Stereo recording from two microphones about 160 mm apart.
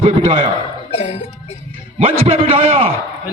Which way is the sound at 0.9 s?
40° left (ahead or behind).